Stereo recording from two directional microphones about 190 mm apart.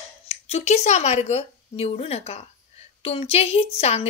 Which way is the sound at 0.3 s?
35° left (ahead or behind).